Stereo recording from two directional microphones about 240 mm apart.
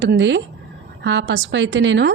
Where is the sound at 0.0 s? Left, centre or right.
Right.